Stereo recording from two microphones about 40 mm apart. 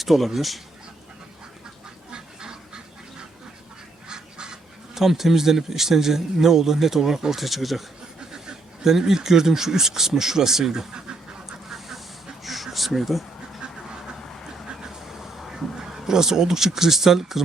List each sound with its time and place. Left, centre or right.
0.0 s speech: centre
2.0 s duck: centre
4.9 s a man's voice: centre
8.3 s speech: centre
11.4 s duck: centre
12.4 s a sound: centre
14.7 s vehicle: centre
15.7 s speech: centre